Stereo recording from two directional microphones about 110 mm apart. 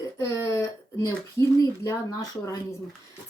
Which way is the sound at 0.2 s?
30° left (ahead or behind).